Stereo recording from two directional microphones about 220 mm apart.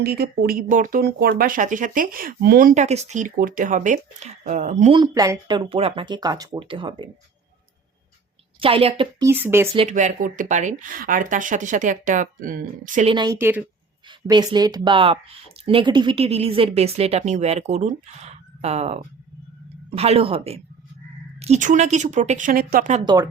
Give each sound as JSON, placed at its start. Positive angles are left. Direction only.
{"t": 0.0, "sound": "speech", "side_deg": -45}
{"t": 8.6, "sound": "a woman's voice", "side_deg": -25}
{"t": 9.2, "sound": "speech", "side_deg": -10}
{"t": 9.7, "sound": "speech", "side_deg": -30}
{"t": 13.1, "sound": "a woman's voice", "side_deg": -20}
{"t": 23.0, "sound": "speech", "side_deg": -15}